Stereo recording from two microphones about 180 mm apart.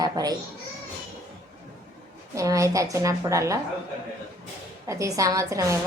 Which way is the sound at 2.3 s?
15° right (ahead or behind).